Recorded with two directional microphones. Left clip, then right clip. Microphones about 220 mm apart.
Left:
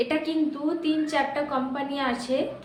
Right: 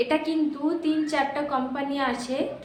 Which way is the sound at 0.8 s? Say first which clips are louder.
Left 1 dB; centre (ahead or behind).